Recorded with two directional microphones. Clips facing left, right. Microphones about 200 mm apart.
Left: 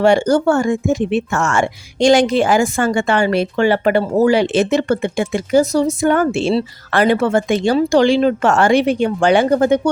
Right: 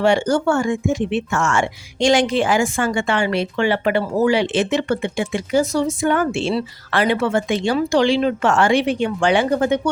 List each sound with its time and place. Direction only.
0.0 s a woman's voice: 40° left (ahead or behind)